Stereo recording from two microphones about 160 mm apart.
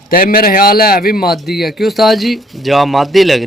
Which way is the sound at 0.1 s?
60° left (ahead or behind).